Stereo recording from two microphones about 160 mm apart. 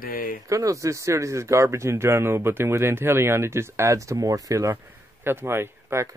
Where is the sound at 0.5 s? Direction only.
20° right (ahead or behind).